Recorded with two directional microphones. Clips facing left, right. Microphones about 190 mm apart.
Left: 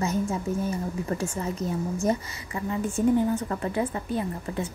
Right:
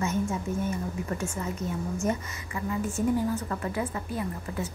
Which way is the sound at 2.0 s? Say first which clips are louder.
Left 3 dB; 30° left (ahead or behind).